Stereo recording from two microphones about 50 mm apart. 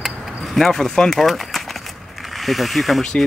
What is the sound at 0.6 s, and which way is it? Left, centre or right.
Speech, centre.